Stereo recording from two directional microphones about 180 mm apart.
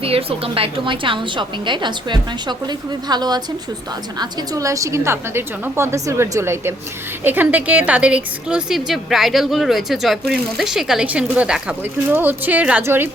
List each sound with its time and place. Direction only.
0.0 s a woman's voice: 30° right (ahead or behind); by 13.1 s 10° right (ahead or behind)